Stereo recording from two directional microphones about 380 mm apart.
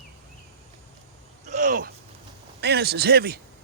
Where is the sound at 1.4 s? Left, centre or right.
Centre.